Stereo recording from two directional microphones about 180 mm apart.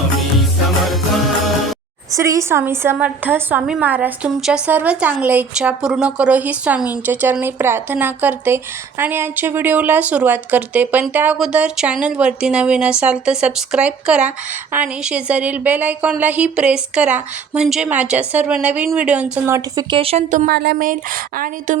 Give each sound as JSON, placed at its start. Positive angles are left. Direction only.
{"t": 2.1, "sound": "speech", "side_deg": -15}
{"t": 19.9, "sound": "speech", "side_deg": -30}
{"t": 20.5, "sound": "speech", "side_deg": -65}